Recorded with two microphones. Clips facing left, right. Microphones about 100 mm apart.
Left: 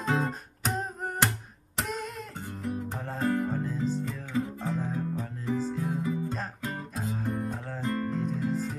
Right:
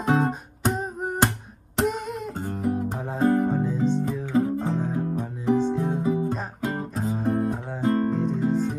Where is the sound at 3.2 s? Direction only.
30° right (ahead or behind).